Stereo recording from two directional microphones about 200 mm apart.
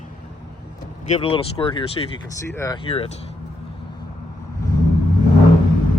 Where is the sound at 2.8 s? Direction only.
30° left (ahead or behind).